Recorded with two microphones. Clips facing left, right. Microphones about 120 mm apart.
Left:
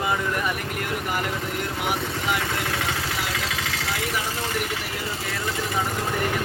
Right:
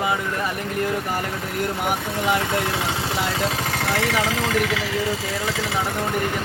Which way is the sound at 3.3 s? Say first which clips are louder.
Right 5 dB; 40° right (ahead or behind).